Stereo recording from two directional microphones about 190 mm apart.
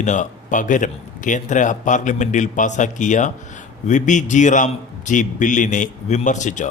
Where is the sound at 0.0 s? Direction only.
40° left (ahead or behind).